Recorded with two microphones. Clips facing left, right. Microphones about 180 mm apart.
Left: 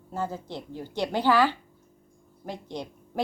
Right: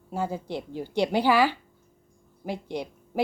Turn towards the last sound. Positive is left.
turn(degrees=-10)  # may be behind; listen again after turning